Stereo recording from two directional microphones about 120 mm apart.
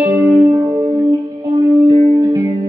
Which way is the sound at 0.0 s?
15° right (ahead or behind).